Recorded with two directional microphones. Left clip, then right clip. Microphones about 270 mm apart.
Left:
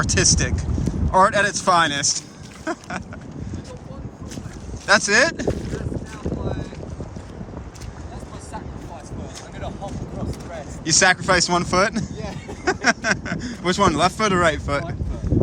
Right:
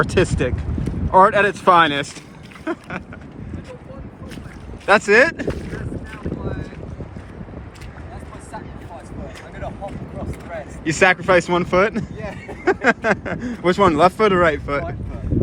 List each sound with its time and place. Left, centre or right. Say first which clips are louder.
0.0 s speech: right 1 dB; centre
4.9 s speech: right 3 dB; centre
6.2 s boat: left 1 dB; centre
9.6 s speech: right 2 dB; centre
10.5 s speech: left 4 dB; centre
12.2 s speech: right 2 dB; centre
12.6 s speech: right 3 dB; centre